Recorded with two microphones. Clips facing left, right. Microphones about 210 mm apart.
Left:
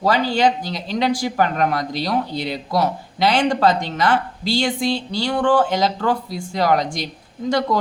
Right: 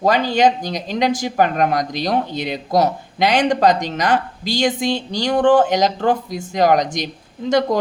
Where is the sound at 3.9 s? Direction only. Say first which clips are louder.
Right 1 dB; 40° right (ahead or behind).